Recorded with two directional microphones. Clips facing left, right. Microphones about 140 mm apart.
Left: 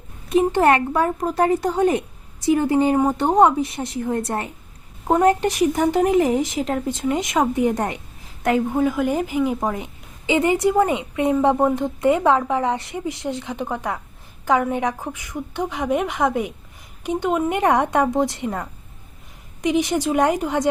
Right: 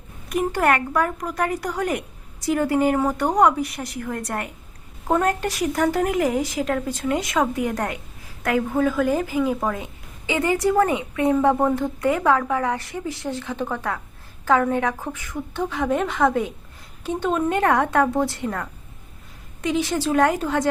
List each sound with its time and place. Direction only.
0.3 s a woman's voice: 25° left (ahead or behind)